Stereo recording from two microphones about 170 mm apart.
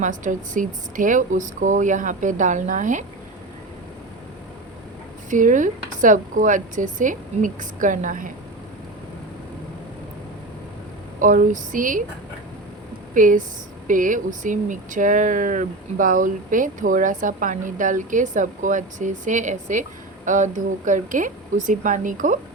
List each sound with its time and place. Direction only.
0.0 s speech: 50° right (ahead or behind)
5.3 s speech: 50° right (ahead or behind)
11.2 s speech: 50° right (ahead or behind)
13.1 s speech: 50° right (ahead or behind)